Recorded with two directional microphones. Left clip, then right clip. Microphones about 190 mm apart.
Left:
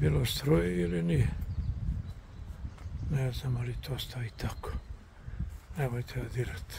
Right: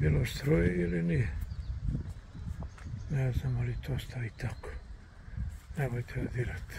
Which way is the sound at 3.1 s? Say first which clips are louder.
Left 1 dB; 10° left (ahead or behind).